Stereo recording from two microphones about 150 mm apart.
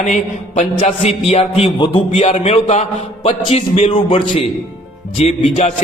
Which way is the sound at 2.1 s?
45° left (ahead or behind).